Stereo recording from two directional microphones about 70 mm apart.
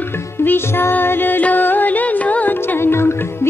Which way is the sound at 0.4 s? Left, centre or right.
Left.